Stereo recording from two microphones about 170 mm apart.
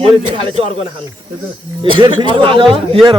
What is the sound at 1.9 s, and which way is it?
Speech, 30° right (ahead or behind).